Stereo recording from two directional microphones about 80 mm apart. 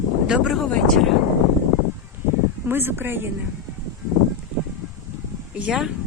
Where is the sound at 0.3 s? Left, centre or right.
Centre.